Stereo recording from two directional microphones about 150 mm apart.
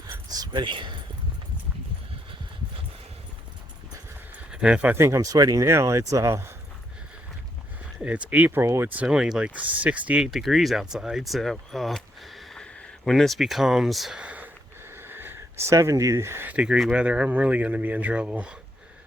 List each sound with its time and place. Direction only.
0.1 s speech: 25° right (ahead or behind)
4.5 s speech: 5° right (ahead or behind)
7.9 s speech: 10° right (ahead or behind)